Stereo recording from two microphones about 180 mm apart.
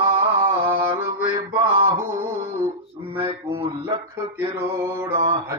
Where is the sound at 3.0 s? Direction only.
20° right (ahead or behind).